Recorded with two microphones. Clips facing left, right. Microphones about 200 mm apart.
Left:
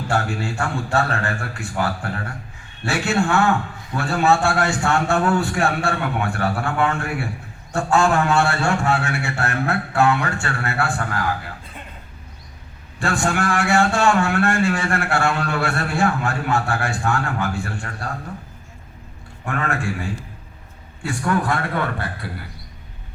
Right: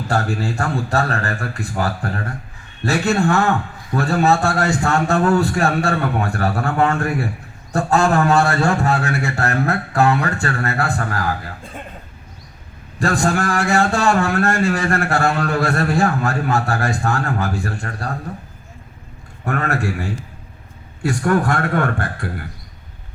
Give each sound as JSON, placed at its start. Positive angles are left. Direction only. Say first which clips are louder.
{"t": 0.1, "sound": "a man's voice", "louder": "right 3 dB", "side_deg": -40}
{"t": 13.0, "sound": "a man's voice", "louder": "right 3 dB", "side_deg": -40}
{"t": 19.5, "sound": "a man's voice", "louder": "right 3 dB", "side_deg": -40}